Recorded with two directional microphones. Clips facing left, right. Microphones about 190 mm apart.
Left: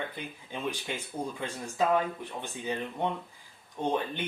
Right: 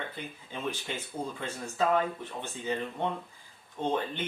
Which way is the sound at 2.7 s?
15° left (ahead or behind).